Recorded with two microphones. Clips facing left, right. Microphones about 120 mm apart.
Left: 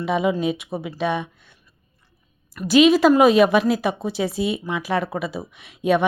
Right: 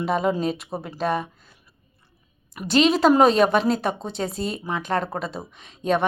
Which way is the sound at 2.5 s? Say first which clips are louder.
Left 4 dB; 10° right (ahead or behind).